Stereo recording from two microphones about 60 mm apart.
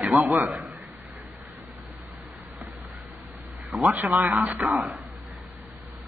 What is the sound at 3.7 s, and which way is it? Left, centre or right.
Speech, right.